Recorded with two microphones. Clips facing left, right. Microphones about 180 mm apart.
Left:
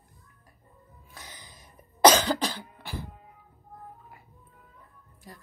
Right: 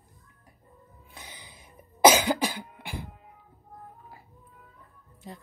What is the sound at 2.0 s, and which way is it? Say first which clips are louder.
Cough: even; 10° right (ahead or behind).